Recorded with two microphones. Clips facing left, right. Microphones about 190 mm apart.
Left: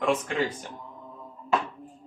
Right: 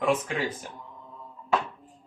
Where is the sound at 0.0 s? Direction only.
5° right (ahead or behind).